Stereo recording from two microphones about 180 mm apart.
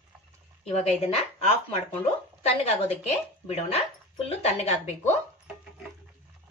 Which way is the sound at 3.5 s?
35° left (ahead or behind).